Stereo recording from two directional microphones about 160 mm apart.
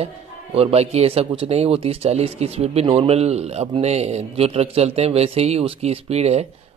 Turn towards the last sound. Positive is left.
turn(degrees=-40)  # may be behind; listen again after turning